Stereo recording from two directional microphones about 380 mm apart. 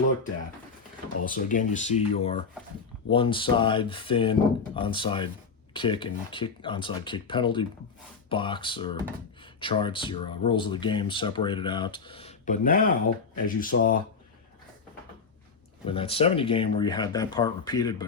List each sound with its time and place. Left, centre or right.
1.2 s speech: left
15.9 s speech: centre